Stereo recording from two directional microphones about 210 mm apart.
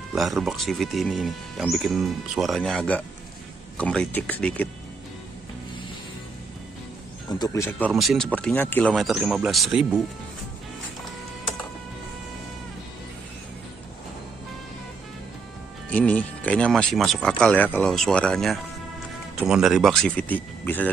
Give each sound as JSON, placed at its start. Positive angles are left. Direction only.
{"t": 0.1, "sound": "speech", "side_deg": 0}
{"t": 7.2, "sound": "speech", "side_deg": 20}
{"t": 7.9, "sound": "speech", "side_deg": 0}
{"t": 15.9, "sound": "speech", "side_deg": 5}